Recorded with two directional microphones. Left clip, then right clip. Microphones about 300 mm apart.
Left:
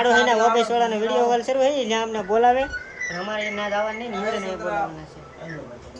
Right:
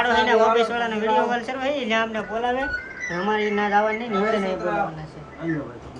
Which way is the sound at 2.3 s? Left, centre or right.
Left.